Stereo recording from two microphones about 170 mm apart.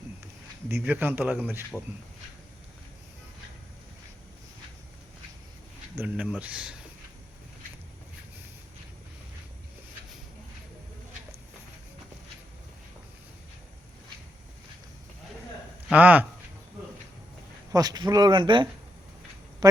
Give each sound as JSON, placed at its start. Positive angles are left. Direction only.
{"t": 0.8, "sound": "speech", "side_deg": -10}
{"t": 6.0, "sound": "speech", "side_deg": -10}
{"t": 15.9, "sound": "speech", "side_deg": -10}
{"t": 17.7, "sound": "speech", "side_deg": -25}